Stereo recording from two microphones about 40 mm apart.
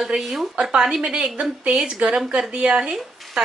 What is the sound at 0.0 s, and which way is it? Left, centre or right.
Speech, centre.